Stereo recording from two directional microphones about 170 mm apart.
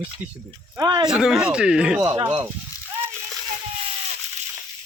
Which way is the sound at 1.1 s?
Centre (ahead or behind).